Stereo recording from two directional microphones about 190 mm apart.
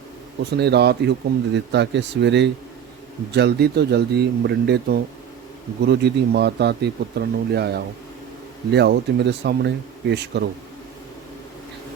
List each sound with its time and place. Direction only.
0.5 s speech: 60° right (ahead or behind)